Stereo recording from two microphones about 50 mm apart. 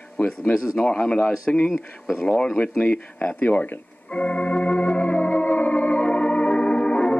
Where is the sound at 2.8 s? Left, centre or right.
Left.